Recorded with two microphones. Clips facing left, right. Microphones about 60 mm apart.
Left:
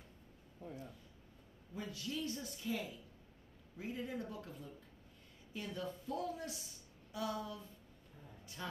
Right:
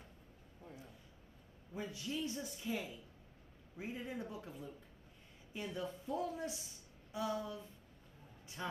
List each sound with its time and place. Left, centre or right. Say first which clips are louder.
1.7 s speech: right 1 dB; right